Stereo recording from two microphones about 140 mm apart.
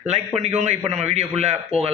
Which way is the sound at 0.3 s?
50° right (ahead or behind).